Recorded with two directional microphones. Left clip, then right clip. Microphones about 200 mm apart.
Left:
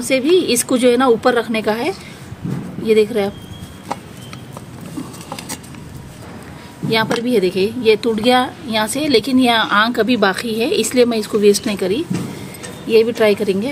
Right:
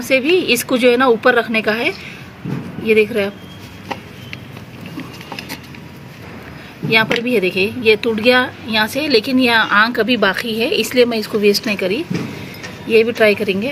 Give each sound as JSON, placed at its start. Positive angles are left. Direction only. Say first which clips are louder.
{"t": 0.1, "sound": "a woman's voice", "louder": "right 1 dB", "side_deg": 25}
{"t": 6.9, "sound": "a woman's voice", "louder": "right 2 dB", "side_deg": 30}